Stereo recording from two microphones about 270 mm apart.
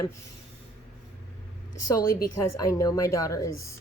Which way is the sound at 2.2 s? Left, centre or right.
Left.